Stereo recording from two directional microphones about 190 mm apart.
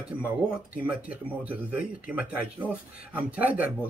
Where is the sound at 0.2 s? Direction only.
5° right (ahead or behind).